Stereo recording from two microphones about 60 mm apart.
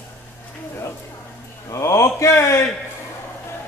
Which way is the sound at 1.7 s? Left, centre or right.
Left.